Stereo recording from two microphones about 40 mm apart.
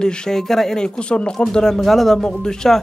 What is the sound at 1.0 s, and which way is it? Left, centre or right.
Speech, left.